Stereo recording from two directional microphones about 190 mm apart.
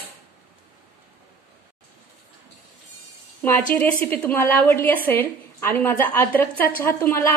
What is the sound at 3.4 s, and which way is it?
A woman's voice, 10° left (ahead or behind).